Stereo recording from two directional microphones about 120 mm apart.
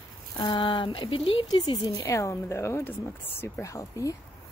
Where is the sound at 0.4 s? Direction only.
40° left (ahead or behind).